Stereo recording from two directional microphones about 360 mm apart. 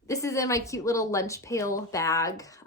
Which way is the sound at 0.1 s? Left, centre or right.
Centre.